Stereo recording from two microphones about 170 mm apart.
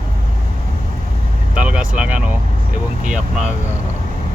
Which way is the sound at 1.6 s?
10° right (ahead or behind).